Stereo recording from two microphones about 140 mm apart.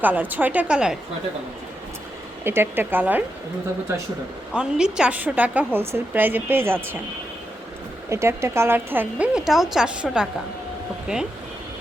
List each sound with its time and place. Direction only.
0.0 s a woman's voice: 10° right (ahead or behind)
2.4 s a woman's voice: 15° right (ahead or behind)
4.5 s a woman's voice: 5° right (ahead or behind)
8.1 s a woman's voice: 20° right (ahead or behind)